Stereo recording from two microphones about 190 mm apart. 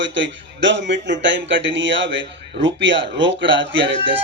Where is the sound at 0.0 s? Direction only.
75° right (ahead or behind).